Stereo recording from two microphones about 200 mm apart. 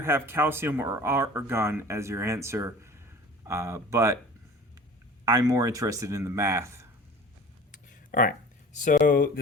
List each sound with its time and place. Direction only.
0.0 s speech: 10° right (ahead or behind)
5.2 s speech: 15° right (ahead or behind)
7.7 s a sound: 40° left (ahead or behind)
8.8 s speech: 40° left (ahead or behind)